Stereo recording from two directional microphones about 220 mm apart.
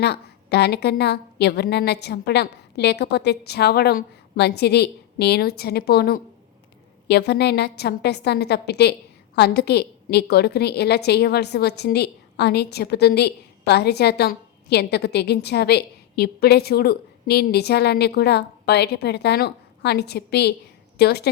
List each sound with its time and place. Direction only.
0.0 s a woman's voice: 50° left (ahead or behind)